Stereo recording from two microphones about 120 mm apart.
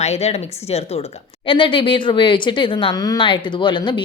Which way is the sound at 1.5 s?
45° left (ahead or behind).